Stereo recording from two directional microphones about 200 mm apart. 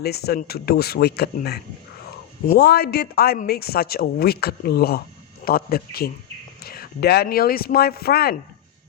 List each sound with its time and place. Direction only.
0.0 s speech: 50° left (ahead or behind)